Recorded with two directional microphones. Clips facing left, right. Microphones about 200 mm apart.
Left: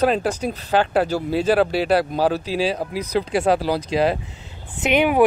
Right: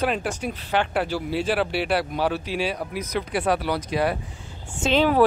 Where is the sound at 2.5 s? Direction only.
90° left.